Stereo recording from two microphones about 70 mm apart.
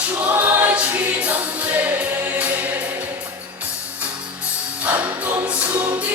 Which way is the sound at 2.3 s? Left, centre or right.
Centre.